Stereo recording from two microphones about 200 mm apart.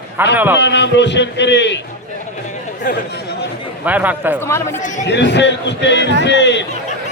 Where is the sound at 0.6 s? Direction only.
60° left (ahead or behind).